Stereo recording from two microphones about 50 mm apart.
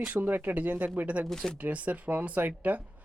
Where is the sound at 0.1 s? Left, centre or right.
Right.